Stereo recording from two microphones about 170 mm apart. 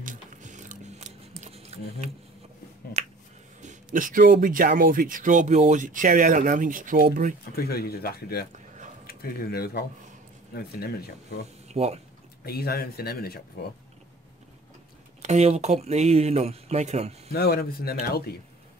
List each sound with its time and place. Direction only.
0.0 s a sound: 50° right (ahead or behind)
3.6 s speech: 50° right (ahead or behind)
7.5 s speech: 65° left (ahead or behind)
11.7 s speech: 40° right (ahead or behind)
12.4 s speech: 65° left (ahead or behind)
15.2 s speech: 40° right (ahead or behind)
17.3 s speech: 65° left (ahead or behind)